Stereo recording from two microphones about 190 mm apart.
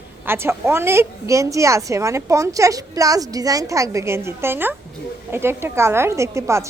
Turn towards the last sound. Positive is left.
turn(degrees=-15)  # may be behind; listen again after turning